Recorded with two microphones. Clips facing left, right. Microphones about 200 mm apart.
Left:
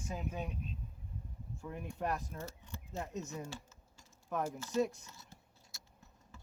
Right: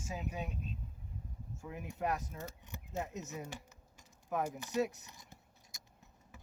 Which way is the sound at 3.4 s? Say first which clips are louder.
Left 1 dB; 15° right (ahead or behind).